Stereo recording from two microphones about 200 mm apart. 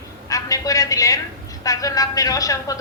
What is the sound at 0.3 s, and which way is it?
A man's voice, 15° left (ahead or behind).